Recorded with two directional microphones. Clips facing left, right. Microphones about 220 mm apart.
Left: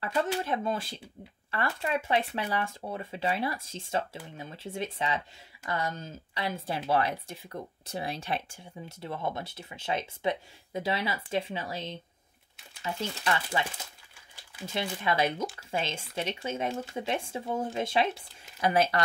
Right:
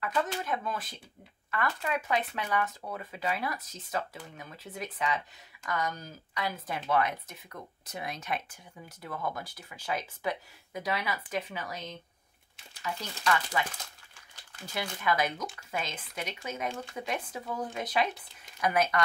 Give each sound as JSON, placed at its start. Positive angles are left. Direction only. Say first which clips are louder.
{"t": 0.0, "sound": "speech", "louder": "left 2 dB", "side_deg": 30}
{"t": 14.7, "sound": "speech", "louder": "left 1 dB", "side_deg": 25}